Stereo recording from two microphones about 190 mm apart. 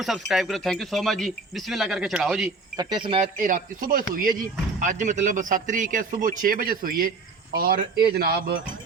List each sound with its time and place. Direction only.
0.0 s speech: centre (ahead or behind)
2.7 s speech: 25° right (ahead or behind)
3.4 s a man's voice: 45° right (ahead or behind)